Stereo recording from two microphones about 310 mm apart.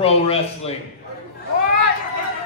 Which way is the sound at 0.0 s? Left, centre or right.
Centre.